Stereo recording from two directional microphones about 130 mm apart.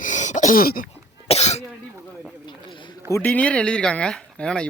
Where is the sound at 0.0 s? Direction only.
70° left (ahead or behind).